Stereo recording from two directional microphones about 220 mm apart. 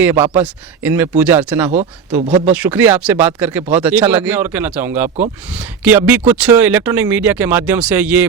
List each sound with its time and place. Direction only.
0.0 s speech: 10° right (ahead or behind)
2.2 s speech: 25° right (ahead or behind)
2.5 s speech: 5° right (ahead or behind)